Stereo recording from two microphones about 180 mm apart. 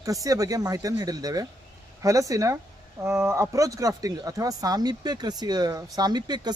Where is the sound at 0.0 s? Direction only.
20° right (ahead or behind).